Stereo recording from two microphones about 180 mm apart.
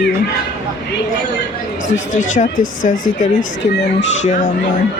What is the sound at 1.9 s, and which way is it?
Speech, 45° left (ahead or behind).